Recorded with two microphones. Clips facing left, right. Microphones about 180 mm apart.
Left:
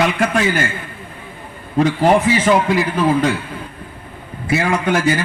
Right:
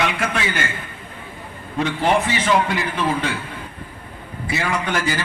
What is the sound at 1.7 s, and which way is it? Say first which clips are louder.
Speech: left 6 dB; 40° left (ahead or behind).